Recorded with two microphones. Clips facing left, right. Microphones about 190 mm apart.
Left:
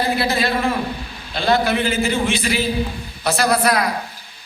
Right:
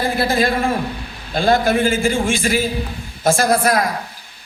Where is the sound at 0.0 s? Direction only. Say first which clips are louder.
Right 2 dB; 50° right (ahead or behind).